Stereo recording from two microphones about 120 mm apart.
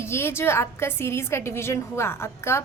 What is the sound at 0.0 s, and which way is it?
A woman's voice, 20° left (ahead or behind).